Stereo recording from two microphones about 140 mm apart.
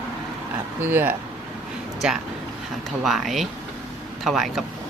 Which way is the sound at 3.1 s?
Centre (ahead or behind).